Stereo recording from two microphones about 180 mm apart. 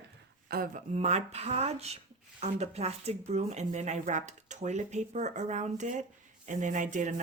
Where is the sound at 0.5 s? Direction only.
60° right (ahead or behind).